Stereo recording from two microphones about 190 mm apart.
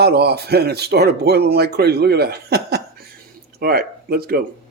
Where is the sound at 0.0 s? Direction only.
55° right (ahead or behind).